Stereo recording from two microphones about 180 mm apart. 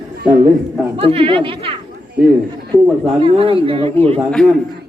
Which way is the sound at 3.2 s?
30° right (ahead or behind).